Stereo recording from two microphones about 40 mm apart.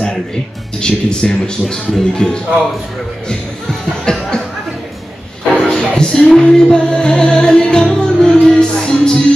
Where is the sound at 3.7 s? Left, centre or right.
Centre.